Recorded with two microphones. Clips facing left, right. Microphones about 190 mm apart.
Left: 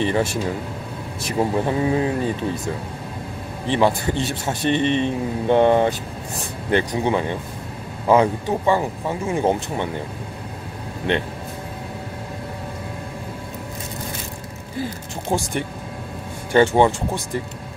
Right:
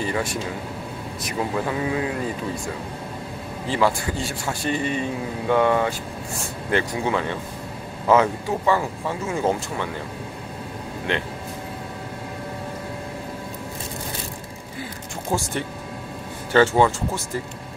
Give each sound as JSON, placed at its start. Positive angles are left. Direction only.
{"t": 0.0, "sound": "a man's voice", "side_deg": 25}
{"t": 3.6, "sound": "a man's voice", "side_deg": 20}
{"t": 16.5, "sound": "speech", "side_deg": 20}